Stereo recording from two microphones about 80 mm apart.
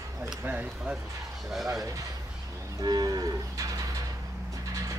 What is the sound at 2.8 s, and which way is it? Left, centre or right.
Moo, right.